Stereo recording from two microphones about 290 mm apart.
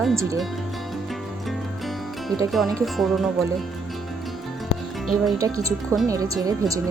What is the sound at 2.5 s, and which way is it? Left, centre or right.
Speech, centre.